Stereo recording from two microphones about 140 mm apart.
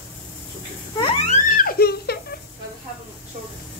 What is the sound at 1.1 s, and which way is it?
Music, 50° left (ahead or behind).